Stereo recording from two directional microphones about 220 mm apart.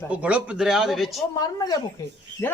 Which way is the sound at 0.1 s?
5° right (ahead or behind).